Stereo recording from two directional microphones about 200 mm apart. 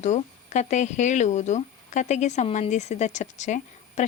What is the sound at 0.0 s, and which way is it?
Speech, 35° left (ahead or behind).